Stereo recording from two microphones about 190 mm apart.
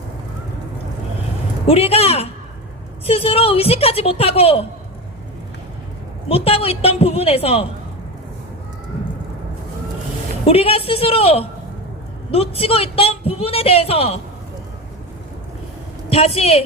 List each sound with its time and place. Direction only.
1.6 s a woman's voice: 30° left (ahead or behind)
6.2 s a woman's voice: 30° left (ahead or behind)
10.4 s a woman's voice: 30° left (ahead or behind)
16.0 s a woman's voice: 30° left (ahead or behind)